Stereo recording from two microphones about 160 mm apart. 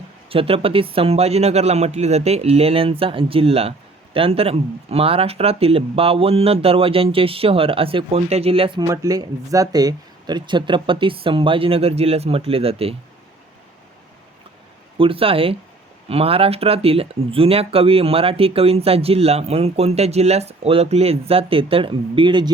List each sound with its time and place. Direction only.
0.3 s a man's voice: 35° right (ahead or behind)
8.9 s a man's voice: 20° right (ahead or behind); by 13.0 s 35° right (ahead or behind)
14.9 s a man's voice: 35° right (ahead or behind)